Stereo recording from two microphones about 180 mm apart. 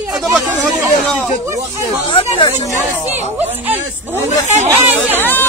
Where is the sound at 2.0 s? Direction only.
30° left (ahead or behind).